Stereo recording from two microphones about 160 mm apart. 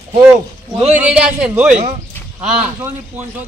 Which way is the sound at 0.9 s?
5° right (ahead or behind).